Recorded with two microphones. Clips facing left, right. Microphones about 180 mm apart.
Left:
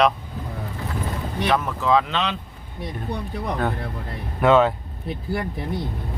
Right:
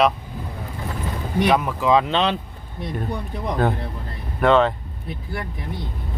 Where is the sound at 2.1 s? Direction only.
30° right (ahead or behind).